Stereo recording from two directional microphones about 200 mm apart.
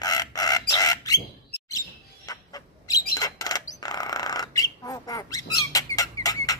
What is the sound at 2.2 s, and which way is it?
Bird, 20° left (ahead or behind).